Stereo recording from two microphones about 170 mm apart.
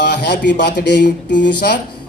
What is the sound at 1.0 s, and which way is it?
Speech, 55° left (ahead or behind).